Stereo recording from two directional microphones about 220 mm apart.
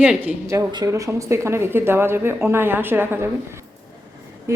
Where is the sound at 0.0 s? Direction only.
5° right (ahead or behind).